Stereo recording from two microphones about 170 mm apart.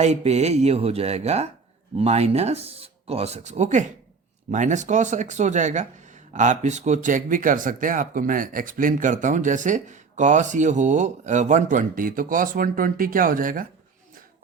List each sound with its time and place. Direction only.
0.0 s speech: 40° right (ahead or behind)